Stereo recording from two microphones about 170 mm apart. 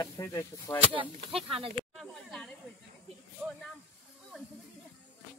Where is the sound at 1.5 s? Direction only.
30° right (ahead or behind).